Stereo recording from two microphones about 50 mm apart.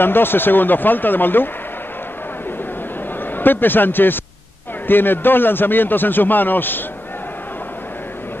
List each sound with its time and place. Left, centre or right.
0.0 s speech: left
3.3 s a man's voice: left